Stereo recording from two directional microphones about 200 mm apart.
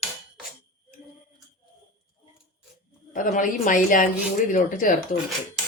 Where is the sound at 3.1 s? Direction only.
40° left (ahead or behind).